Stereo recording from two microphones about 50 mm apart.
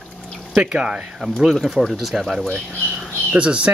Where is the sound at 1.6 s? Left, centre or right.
Centre.